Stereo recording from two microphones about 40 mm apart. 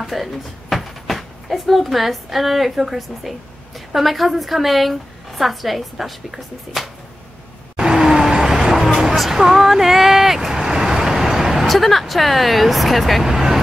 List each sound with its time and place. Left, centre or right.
0.0 s a woman's voice: centre
7.7 s vehicle: centre
9.4 s speech: centre
13.3 s vehicle: centre